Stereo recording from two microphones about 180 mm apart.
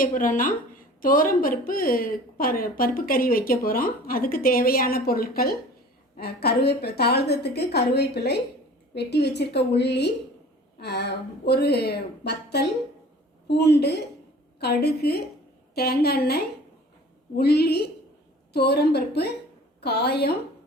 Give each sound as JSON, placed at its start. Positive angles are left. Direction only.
{"t": 0.0, "sound": "a woman's voice", "side_deg": 50}